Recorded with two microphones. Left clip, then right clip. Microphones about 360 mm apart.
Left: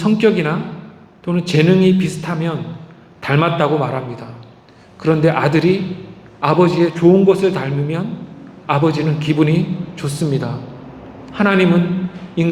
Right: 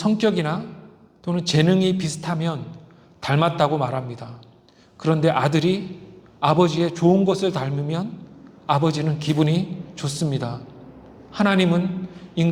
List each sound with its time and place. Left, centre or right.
0.0 s a man's voice: right